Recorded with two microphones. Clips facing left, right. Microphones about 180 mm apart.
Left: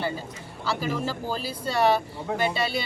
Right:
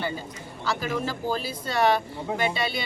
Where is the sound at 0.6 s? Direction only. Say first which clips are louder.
Even; 5° left (ahead or behind).